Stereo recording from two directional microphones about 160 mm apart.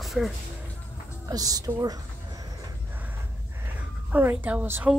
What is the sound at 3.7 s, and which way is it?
A woman's voice, 10° right (ahead or behind).